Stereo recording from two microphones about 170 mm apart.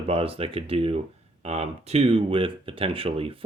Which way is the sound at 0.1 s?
35° right (ahead or behind).